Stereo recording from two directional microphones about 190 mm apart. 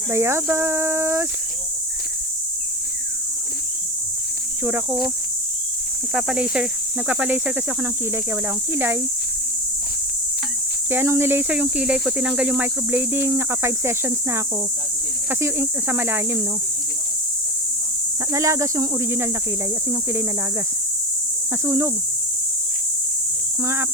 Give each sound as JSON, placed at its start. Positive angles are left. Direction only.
{"t": 0.1, "sound": "speech", "side_deg": -15}
{"t": 4.6, "sound": "speech", "side_deg": -10}
{"t": 6.1, "sound": "speech", "side_deg": -5}
{"t": 10.8, "sound": "speech", "side_deg": -10}
{"t": 18.3, "sound": "speech", "side_deg": -15}
{"t": 21.6, "sound": "speech", "side_deg": -15}